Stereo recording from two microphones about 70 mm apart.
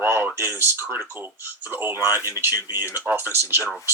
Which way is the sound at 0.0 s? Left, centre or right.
Right.